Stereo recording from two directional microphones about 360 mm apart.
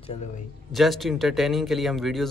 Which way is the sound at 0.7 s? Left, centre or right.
Centre.